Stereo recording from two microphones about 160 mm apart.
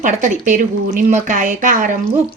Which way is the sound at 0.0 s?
50° right (ahead or behind).